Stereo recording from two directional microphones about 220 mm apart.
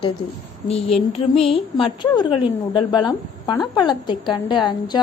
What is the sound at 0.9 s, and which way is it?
A woman's voice, 25° left (ahead or behind).